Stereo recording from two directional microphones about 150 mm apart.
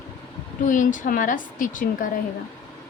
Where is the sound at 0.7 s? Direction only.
60° left (ahead or behind).